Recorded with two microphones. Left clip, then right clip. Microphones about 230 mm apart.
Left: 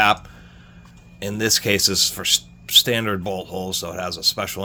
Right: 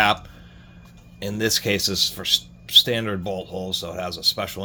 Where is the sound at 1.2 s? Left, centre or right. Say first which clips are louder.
Left 2 dB; left.